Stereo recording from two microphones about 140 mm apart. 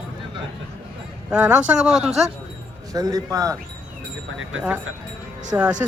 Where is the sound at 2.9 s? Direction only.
25° right (ahead or behind).